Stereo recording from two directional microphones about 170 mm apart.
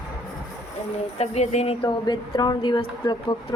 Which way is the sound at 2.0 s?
25° left (ahead or behind).